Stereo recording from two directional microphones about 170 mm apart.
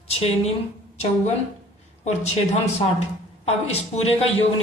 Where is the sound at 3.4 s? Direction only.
35° left (ahead or behind).